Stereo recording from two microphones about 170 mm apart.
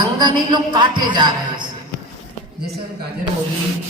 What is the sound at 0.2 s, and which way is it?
A man's voice, 25° right (ahead or behind).